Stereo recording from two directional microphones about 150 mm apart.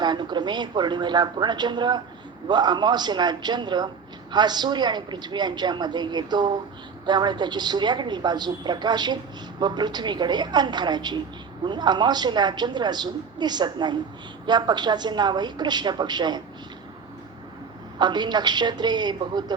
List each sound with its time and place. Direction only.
0.0 s a woman's voice: 30° right (ahead or behind)
18.0 s a woman's voice: 30° right (ahead or behind)